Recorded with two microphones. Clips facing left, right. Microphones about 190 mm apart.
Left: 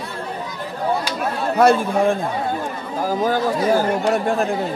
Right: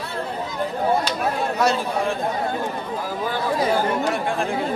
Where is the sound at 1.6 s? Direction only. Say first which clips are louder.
Left 9 dB; 55° left (ahead or behind).